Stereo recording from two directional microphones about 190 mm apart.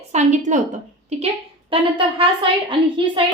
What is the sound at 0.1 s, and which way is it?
Speech, 40° right (ahead or behind).